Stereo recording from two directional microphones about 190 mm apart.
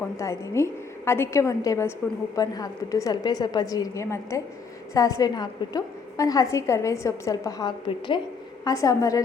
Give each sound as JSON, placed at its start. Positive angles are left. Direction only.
{"t": 0.0, "sound": "a woman's voice", "side_deg": 15}